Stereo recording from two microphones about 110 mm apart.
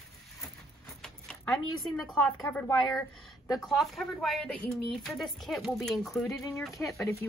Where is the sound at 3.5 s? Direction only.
Centre (ahead or behind).